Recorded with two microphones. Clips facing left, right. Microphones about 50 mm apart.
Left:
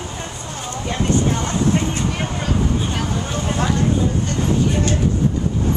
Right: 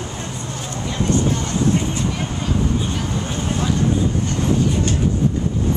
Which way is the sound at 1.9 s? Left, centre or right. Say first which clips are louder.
Left 1 dB; left.